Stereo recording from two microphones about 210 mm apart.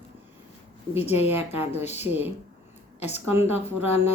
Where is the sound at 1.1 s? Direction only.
10° right (ahead or behind).